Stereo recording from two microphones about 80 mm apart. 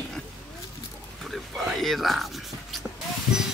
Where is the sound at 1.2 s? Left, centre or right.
Centre.